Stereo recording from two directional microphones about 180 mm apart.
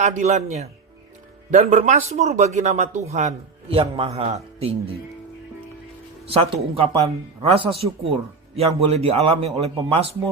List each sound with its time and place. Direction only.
0.0 s a man's voice: 40° right (ahead or behind)
6.3 s a man's voice: 30° right (ahead or behind)